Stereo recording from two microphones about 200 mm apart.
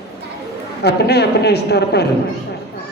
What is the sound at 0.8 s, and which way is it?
A woman's voice, 55° left (ahead or behind).